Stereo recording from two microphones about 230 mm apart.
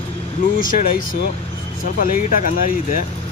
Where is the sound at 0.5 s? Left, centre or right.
Left.